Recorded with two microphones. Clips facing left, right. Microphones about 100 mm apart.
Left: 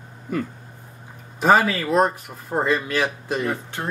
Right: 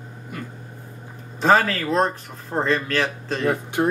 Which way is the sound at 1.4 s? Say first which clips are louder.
Left 1 dB; 10° left (ahead or behind).